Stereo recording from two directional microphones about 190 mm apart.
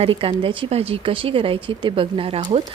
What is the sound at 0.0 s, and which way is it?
A woman's voice, 30° right (ahead or behind).